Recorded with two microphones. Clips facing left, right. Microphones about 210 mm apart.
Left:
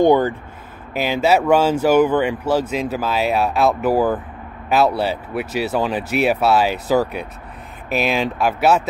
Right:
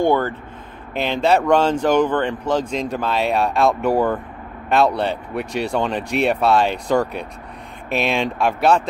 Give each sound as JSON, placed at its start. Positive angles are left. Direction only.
{"t": 0.0, "sound": "speech", "side_deg": 15}
{"t": 0.9, "sound": "speech", "side_deg": 5}